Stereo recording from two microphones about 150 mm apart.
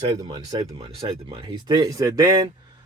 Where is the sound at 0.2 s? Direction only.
30° right (ahead or behind).